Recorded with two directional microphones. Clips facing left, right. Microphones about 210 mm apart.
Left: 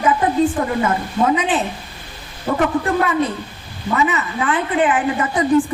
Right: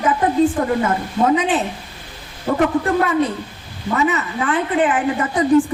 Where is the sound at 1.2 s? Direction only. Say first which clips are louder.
Right 1 dB; 40° right (ahead or behind).